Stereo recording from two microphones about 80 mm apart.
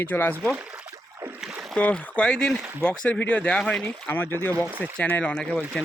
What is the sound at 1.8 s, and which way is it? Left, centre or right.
Speech, centre.